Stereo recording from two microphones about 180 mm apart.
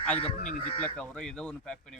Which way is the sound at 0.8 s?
5° left (ahead or behind).